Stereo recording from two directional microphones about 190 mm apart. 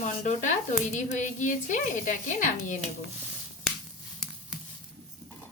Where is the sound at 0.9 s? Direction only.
40° left (ahead or behind).